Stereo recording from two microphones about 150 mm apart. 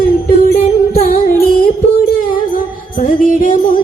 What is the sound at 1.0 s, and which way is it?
Music, 70° left (ahead or behind).